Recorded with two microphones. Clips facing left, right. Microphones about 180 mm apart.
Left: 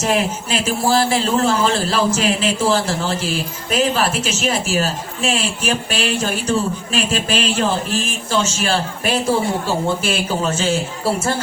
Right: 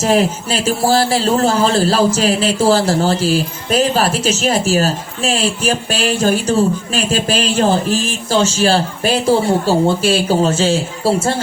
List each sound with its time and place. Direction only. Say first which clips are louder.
0.0 s speech: right 5 dB; 35° right (ahead or behind)